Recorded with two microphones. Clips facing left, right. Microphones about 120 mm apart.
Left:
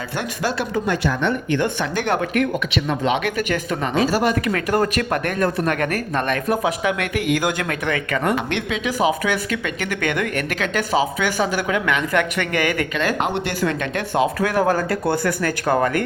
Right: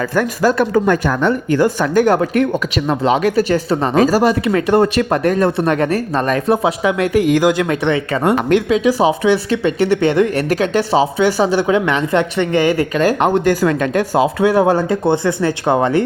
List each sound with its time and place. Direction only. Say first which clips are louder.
0.2 s speech: right 9 dB; 45° right (ahead or behind); by 8.4 s 25° right (ahead or behind)
8.4 s speech: right 11 dB; 40° right (ahead or behind)